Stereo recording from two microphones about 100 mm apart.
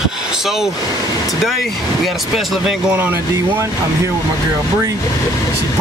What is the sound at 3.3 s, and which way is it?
Speech, 30° right (ahead or behind).